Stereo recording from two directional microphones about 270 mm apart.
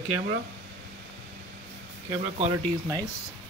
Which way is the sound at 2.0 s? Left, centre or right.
Right.